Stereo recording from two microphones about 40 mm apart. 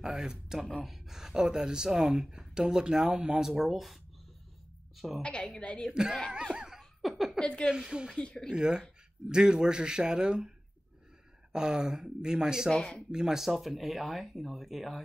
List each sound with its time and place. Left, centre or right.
0.0 s a woman's voice: centre
5.2 s a woman's voice: left
6.5 s laughter: centre
6.8 s laughter: centre
7.3 s a woman's voice: left
7.7 s a man's voice: right
11.5 s speech: centre
12.7 s a woman's voice: centre
13.1 s speech: centre